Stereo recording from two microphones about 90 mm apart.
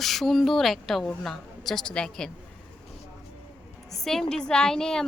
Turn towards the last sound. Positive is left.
turn(degrees=5)  # may be behind; listen again after turning